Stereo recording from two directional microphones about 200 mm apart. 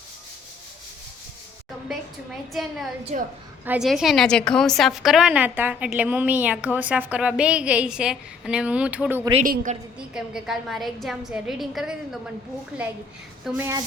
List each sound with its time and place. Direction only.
1.9 s a sound: centre (ahead or behind)
2.5 s a woman's voice: centre (ahead or behind)
9.4 s a woman's voice: 40° right (ahead or behind)
10.2 s a woman's voice: centre (ahead or behind)